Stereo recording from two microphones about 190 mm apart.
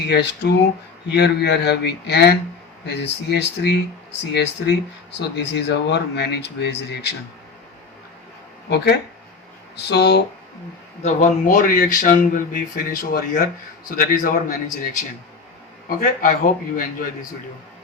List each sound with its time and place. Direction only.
1.1 s speech: 60° left (ahead or behind)
8.7 s speech: 60° left (ahead or behind)
11.0 s speech: 45° left (ahead or behind)